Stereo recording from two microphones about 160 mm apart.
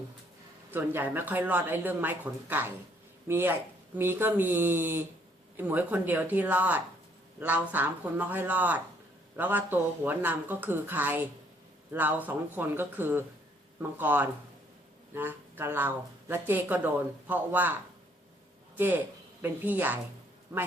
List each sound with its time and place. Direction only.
0.7 s speech: 15° right (ahead or behind)
19.4 s speech: 10° right (ahead or behind)